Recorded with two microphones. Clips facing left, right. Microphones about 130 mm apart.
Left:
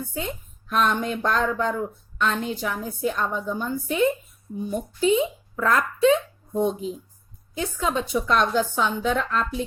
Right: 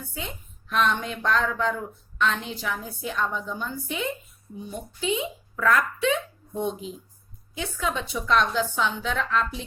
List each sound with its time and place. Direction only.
0.1 s a woman's voice: 40° left (ahead or behind)